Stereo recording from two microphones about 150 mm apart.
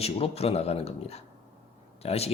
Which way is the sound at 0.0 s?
40° left (ahead or behind).